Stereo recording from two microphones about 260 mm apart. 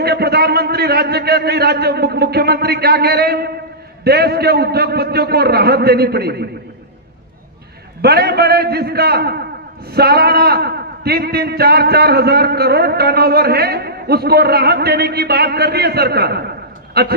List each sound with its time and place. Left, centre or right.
0.0 s a man's voice: right
8.0 s a man's voice: right